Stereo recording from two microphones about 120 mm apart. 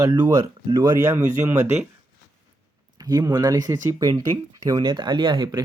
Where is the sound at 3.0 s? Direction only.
30° right (ahead or behind).